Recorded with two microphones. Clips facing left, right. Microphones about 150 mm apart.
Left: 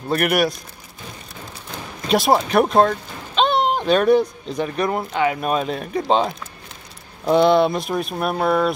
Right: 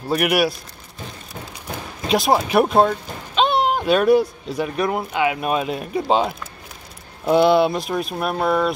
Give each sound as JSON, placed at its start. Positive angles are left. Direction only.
{"t": 0.1, "sound": "speech", "side_deg": -5}
{"t": 2.0, "sound": "speech", "side_deg": 0}